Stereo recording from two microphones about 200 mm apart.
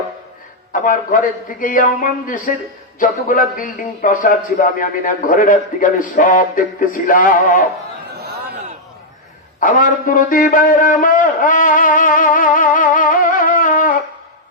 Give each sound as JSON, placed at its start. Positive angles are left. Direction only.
{"t": 0.7, "sound": "a man's voice", "side_deg": 40}
{"t": 8.2, "sound": "a sound", "side_deg": -50}
{"t": 9.6, "sound": "a man's voice", "side_deg": 40}